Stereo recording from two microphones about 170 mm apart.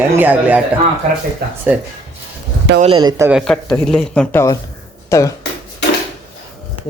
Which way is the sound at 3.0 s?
25° right (ahead or behind).